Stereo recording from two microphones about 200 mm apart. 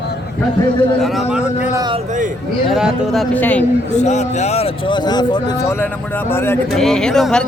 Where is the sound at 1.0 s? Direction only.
Centre (ahead or behind).